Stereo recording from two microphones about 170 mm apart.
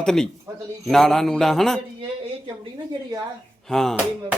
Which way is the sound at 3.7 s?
Centre (ahead or behind).